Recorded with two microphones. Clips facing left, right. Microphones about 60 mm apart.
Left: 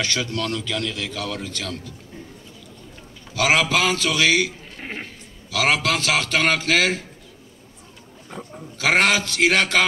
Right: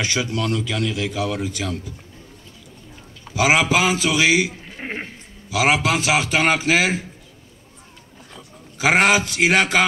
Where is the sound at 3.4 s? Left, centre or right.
Centre.